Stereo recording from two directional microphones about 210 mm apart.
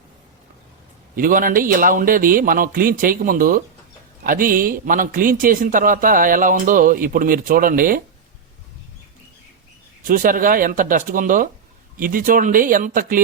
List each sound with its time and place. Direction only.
1.1 s a man's voice: 40° right (ahead or behind)
10.0 s a man's voice: 40° right (ahead or behind)